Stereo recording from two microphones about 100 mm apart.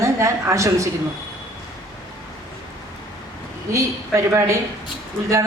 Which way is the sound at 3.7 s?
30° right (ahead or behind).